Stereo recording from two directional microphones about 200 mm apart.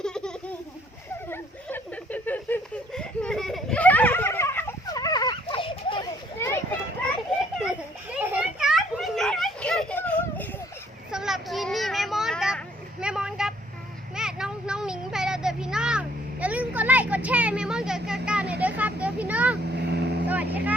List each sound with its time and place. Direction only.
0.0 s a sound: 5° left (ahead or behind); by 6.1 s 25° left (ahead or behind)
6.4 s children playing: 10° left (ahead or behind)
7.3 s children playing: 5° right (ahead or behind)
11.1 s children playing: centre (ahead or behind)
14.2 s a sound: 5° right (ahead or behind)
18.6 s vehicle: 5° right (ahead or behind)
19.7 s vehicle: 55° right (ahead or behind)
20.2 s vehicle: 10° right (ahead or behind)